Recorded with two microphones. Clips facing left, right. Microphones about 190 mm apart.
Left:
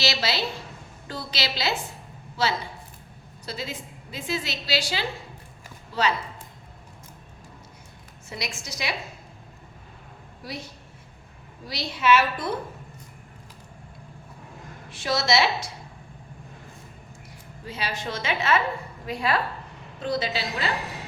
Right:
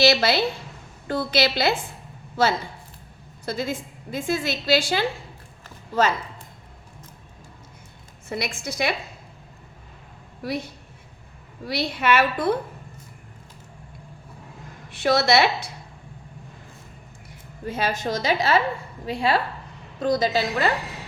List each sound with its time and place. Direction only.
0.0 s a woman's voice: 55° right (ahead or behind)
8.3 s a woman's voice: 55° right (ahead or behind)
10.4 s a woman's voice: 60° right (ahead or behind)
11.7 s a woman's voice: 60° right (ahead or behind)
14.8 s a woman's voice: 60° right (ahead or behind)
17.7 s a woman's voice: 50° right (ahead or behind); by 19.4 s 30° right (ahead or behind)
20.0 s a woman's voice: 45° right (ahead or behind)